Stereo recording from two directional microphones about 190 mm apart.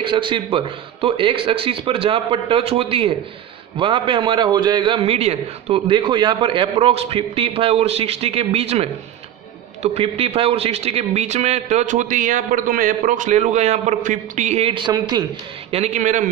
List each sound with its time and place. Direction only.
0.0 s a man's voice: 25° right (ahead or behind)
15.7 s a man's voice: 40° right (ahead or behind)